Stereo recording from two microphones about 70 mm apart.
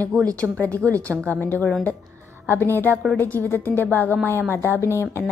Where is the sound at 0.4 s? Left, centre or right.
Left.